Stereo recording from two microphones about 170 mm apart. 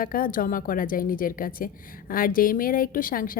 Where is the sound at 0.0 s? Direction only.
55° left (ahead or behind).